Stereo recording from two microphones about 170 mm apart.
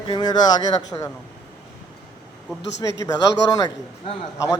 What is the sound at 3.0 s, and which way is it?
Speech, 20° left (ahead or behind).